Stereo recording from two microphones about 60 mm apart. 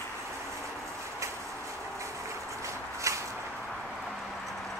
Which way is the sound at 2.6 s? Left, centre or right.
Right.